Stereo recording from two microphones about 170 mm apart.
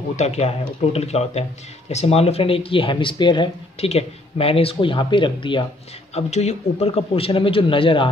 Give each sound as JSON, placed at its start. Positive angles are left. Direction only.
{"t": 0.1, "sound": "speech", "side_deg": 40}
{"t": 6.1, "sound": "speech", "side_deg": 40}